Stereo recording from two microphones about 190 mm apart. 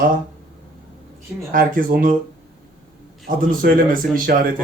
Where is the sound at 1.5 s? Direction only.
50° right (ahead or behind).